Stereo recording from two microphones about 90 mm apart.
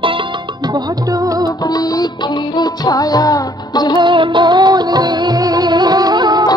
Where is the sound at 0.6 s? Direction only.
50° right (ahead or behind).